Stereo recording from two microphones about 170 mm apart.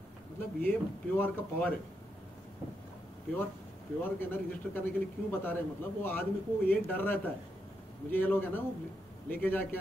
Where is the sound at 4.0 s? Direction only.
10° left (ahead or behind).